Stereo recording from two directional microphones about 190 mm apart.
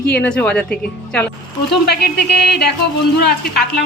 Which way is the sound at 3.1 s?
55° left (ahead or behind).